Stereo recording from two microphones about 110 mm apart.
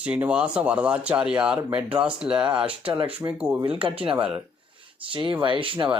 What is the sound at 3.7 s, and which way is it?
Speech, 55° right (ahead or behind).